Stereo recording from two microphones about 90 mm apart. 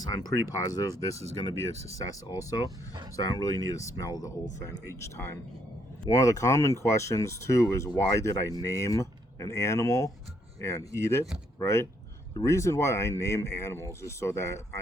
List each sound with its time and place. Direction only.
0.0 s speech: 40° left (ahead or behind)
4.9 s speech: 30° left (ahead or behind)